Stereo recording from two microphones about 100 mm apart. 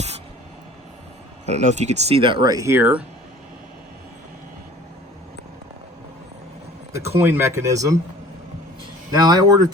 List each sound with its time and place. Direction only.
1.5 s speech: 90° right; by 2.4 s 65° right (ahead or behind)
2.4 s speech: 35° right (ahead or behind); by 3.0 s 20° right (ahead or behind)
7.2 s speech: 25° right (ahead or behind)
9.1 s speech: 40° right (ahead or behind)